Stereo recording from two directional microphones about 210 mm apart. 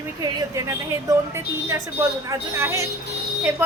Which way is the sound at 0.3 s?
15° right (ahead or behind).